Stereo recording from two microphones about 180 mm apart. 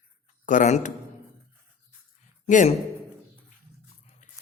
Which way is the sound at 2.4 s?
45° left (ahead or behind).